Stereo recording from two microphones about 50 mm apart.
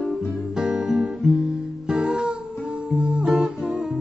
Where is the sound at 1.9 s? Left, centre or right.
Centre.